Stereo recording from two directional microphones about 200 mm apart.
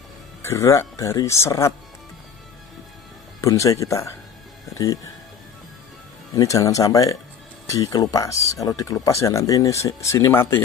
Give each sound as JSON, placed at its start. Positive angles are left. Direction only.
{"t": 0.4, "sound": "speech", "side_deg": 15}
{"t": 3.3, "sound": "speech", "side_deg": 15}
{"t": 6.3, "sound": "speech", "side_deg": 15}